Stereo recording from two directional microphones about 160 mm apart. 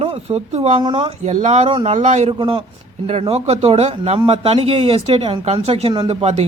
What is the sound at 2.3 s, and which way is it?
Speech, 30° right (ahead or behind).